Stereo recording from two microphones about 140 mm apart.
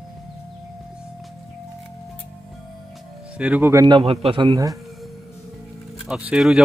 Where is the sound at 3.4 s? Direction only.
15° right (ahead or behind).